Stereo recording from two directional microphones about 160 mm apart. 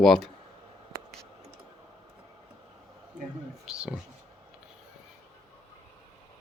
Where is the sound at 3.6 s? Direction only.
5° right (ahead or behind).